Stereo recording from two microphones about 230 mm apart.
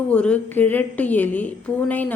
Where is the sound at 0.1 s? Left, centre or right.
Centre.